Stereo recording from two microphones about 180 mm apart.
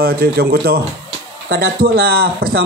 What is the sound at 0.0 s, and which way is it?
A man's voice, 60° right (ahead or behind).